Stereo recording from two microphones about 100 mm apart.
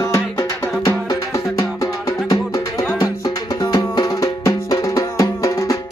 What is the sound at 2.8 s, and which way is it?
Music, 35° left (ahead or behind).